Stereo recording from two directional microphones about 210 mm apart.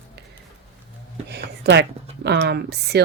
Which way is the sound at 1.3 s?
50° right (ahead or behind).